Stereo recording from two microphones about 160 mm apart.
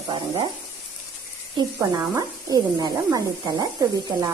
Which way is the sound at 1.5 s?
20° right (ahead or behind).